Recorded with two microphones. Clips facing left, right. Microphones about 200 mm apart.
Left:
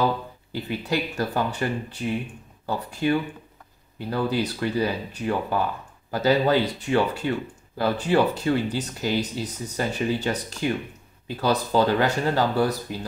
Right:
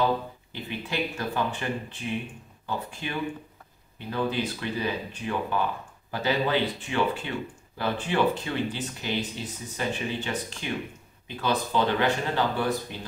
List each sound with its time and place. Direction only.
0.5 s speech: 40° left (ahead or behind)